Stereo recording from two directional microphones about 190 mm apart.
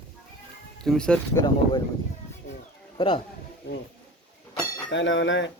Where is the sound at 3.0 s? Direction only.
25° left (ahead or behind).